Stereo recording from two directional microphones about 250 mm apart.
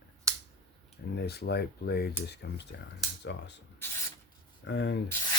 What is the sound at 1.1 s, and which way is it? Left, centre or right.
Speech, left.